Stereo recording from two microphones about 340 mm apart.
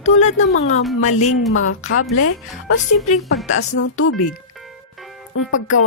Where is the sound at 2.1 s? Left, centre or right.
Left.